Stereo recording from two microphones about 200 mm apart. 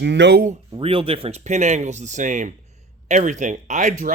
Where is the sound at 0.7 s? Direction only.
25° right (ahead or behind).